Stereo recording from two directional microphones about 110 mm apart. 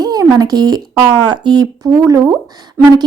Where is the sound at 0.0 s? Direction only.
35° right (ahead or behind).